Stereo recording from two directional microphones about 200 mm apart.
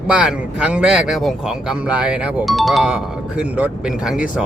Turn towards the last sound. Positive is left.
turn(degrees=-5)  # may be behind; listen again after turning